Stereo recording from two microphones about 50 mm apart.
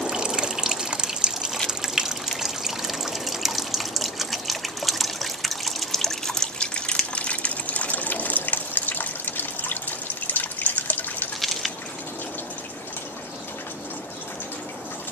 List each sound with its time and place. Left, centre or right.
0.0 s water: centre; by 11.2 s left